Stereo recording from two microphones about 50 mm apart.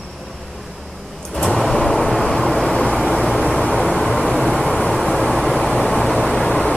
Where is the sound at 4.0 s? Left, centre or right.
Centre.